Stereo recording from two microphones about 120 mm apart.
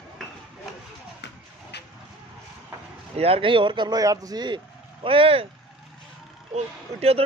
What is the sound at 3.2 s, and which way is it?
Speech, 50° right (ahead or behind).